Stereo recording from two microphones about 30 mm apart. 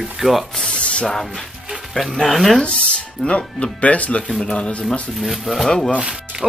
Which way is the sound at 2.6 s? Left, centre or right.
Left.